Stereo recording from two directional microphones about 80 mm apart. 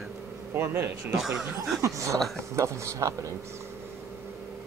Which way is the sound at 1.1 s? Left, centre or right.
Centre.